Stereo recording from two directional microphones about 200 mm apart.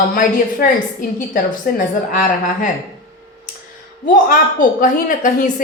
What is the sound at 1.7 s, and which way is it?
Speech, 45° left (ahead or behind).